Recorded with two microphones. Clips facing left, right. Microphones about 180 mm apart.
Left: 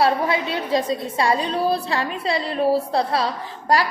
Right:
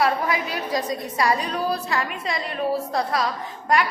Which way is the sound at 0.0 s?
30° left (ahead or behind).